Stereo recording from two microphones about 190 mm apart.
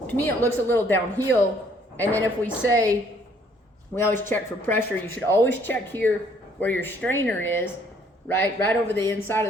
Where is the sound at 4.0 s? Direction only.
10° left (ahead or behind).